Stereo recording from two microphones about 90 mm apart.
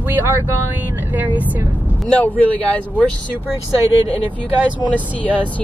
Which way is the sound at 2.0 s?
15° left (ahead or behind).